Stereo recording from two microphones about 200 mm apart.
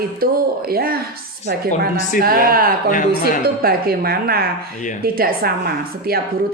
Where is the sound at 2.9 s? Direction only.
40° left (ahead or behind).